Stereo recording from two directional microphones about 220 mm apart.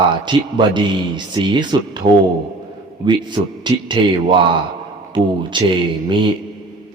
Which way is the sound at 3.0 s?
20° right (ahead or behind).